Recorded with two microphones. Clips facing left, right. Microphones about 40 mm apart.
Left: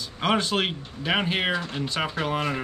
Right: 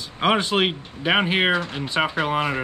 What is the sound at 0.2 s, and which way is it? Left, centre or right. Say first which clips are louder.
Speech: right 4 dB; centre.